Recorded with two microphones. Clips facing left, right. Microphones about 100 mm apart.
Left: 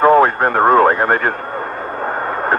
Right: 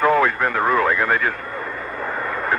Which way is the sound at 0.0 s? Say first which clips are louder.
Left 6 dB; 40° left (ahead or behind).